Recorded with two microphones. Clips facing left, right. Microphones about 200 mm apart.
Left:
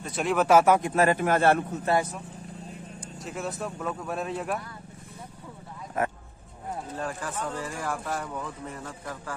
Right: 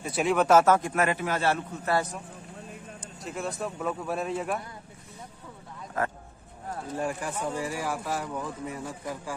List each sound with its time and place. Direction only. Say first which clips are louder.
0.0 s speech: right 1 dB; 5° right (ahead or behind); by 0.9 s 15° left (ahead or behind)
0.9 s a man's voice: left 4 dB; 40° left (ahead or behind)
3.3 s speech: right 1 dB; centre (ahead or behind)
7.0 s speech: right 3 dB; 15° right (ahead or behind)